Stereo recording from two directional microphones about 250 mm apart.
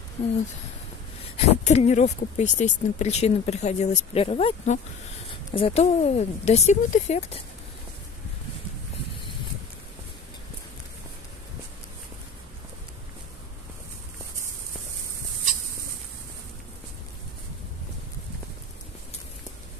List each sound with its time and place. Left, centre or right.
1.3 s speech: left